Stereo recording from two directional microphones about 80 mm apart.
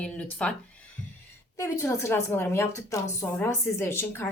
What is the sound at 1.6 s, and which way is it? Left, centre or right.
A woman's voice, left.